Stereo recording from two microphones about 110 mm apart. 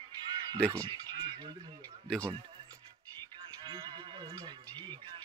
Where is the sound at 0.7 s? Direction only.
40° right (ahead or behind).